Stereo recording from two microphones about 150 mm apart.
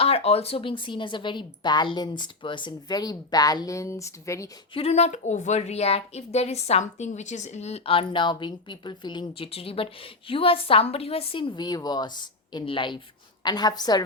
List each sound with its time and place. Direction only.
0.0 s a woman's voice: 40° left (ahead or behind); by 4.4 s 20° left (ahead or behind)
4.7 s a woman's voice: 40° left (ahead or behind); by 14.0 s 25° left (ahead or behind)